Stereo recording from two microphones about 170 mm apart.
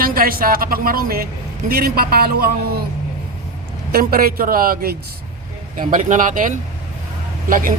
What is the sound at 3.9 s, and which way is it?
A woman's voice, 60° right (ahead or behind).